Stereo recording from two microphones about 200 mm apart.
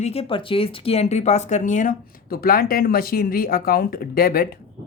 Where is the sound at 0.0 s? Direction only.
30° left (ahead or behind); by 4.4 s 50° left (ahead or behind).